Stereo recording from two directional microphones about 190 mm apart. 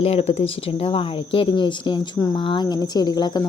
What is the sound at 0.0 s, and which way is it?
Speech, 30° left (ahead or behind).